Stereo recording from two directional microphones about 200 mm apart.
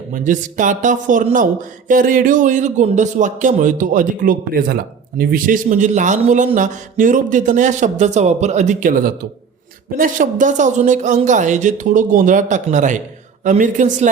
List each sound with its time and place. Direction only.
0.1 s a man's voice: 40° right (ahead or behind)